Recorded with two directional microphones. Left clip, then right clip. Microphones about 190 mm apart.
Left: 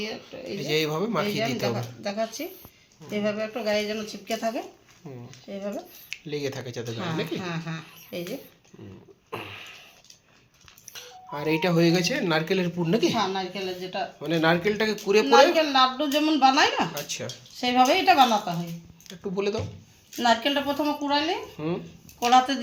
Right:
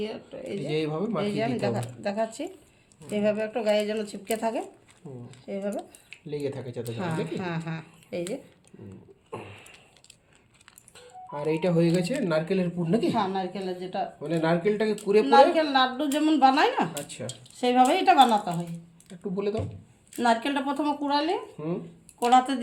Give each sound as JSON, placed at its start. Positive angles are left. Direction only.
{"t": 0.0, "sound": "speech", "side_deg": 35}
{"t": 0.6, "sound": "speech", "side_deg": 0}
{"t": 6.1, "sound": "speech", "side_deg": 5}
{"t": 7.3, "sound": "speech", "side_deg": -10}
{"t": 9.3, "sound": "a sound", "side_deg": 5}
{"t": 10.9, "sound": "speech", "side_deg": 5}
{"t": 13.1, "sound": "a woman's voice", "side_deg": -20}
{"t": 14.2, "sound": "speech", "side_deg": 5}
{"t": 15.3, "sound": "speech", "side_deg": -5}
{"t": 17.1, "sound": "speech", "side_deg": 5}
{"t": 19.0, "sound": "speech", "side_deg": 5}
{"t": 21.6, "sound": "speech", "side_deg": 10}
{"t": 22.2, "sound": "speech", "side_deg": -5}